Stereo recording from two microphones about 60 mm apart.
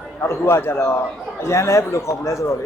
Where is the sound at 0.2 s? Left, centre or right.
Left.